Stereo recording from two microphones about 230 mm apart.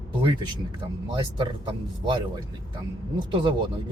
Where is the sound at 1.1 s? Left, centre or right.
Right.